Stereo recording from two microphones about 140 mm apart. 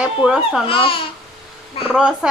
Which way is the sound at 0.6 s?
40° left (ahead or behind).